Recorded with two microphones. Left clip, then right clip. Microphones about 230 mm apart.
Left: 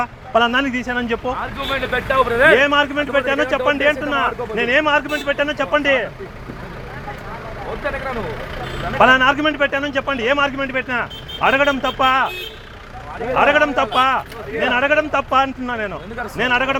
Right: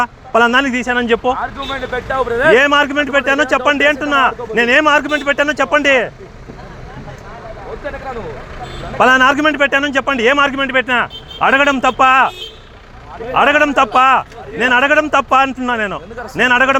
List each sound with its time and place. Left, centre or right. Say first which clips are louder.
0.0 s speech: right 4 dB; right
1.4 s speech: right 1 dB; centre
2.5 s speech: right 3 dB; right
9.0 s speech: right 3 dB; right
13.3 s speech: right 4 dB; right